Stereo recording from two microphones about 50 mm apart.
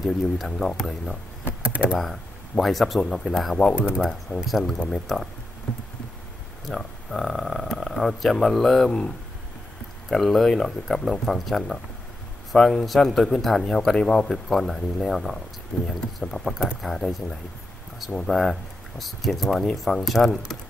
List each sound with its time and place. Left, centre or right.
0.0 s speech: centre
1.6 s computer keyboard: right
2.0 s speech: centre
3.7 s speech: centre
4.5 s speech: centre
4.7 s speech: centre
5.7 s a sound: centre
6.6 s speech: centre
10.0 s speech: centre